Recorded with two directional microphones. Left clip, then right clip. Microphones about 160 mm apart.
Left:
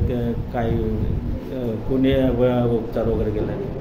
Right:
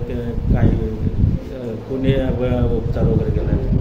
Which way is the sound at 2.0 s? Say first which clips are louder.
Left 2 dB; 25° left (ahead or behind).